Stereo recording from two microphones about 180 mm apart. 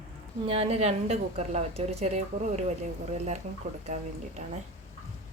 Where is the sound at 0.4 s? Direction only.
35° right (ahead or behind).